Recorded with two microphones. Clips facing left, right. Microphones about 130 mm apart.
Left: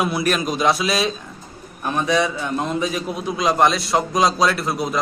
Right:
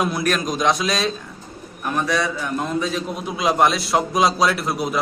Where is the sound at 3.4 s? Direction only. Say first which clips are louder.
Even; centre (ahead or behind).